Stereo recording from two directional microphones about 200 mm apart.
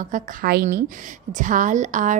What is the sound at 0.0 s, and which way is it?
A woman's voice, 45° right (ahead or behind).